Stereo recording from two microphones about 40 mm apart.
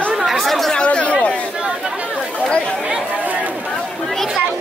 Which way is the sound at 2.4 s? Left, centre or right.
Left.